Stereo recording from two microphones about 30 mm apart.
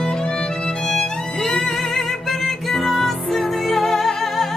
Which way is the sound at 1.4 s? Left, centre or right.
Centre.